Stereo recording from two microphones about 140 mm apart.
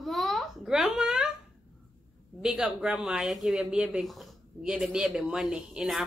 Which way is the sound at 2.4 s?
5° right (ahead or behind).